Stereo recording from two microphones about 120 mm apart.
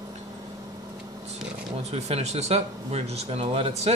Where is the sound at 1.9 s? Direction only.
60° right (ahead or behind).